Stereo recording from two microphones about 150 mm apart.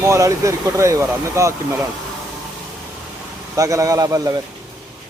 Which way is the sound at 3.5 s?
20° right (ahead or behind).